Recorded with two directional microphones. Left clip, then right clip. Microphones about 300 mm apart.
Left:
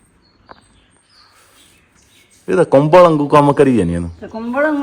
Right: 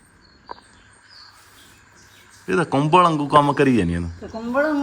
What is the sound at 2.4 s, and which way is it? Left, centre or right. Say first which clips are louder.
Speech: left 9 dB; centre.